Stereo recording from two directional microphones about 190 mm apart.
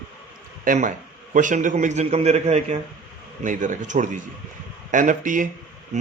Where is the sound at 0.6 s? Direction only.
45° right (ahead or behind).